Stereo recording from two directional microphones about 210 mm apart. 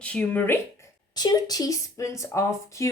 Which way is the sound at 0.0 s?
5° left (ahead or behind).